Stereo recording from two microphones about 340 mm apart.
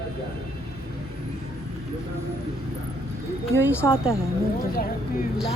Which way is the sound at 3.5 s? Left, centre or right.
Centre.